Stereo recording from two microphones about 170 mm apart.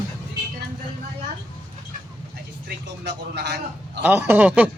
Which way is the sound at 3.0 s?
85° right.